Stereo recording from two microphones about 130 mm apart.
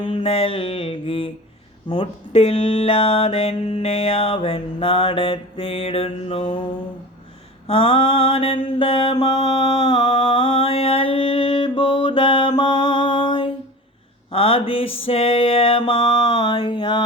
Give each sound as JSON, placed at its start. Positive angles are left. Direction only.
{"t": 0.0, "sound": "mantra", "side_deg": 40}
{"t": 9.8, "sound": "mantra", "side_deg": 35}
{"t": 16.4, "sound": "a sound", "side_deg": 35}